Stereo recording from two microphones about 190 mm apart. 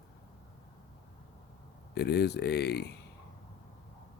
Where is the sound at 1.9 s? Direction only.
60° left (ahead or behind).